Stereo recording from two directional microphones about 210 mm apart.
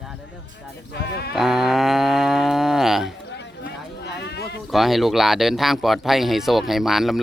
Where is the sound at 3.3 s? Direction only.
50° left (ahead or behind).